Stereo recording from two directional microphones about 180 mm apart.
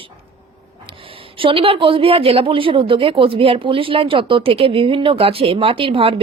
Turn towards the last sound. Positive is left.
turn(degrees=-30)  # may be behind; listen again after turning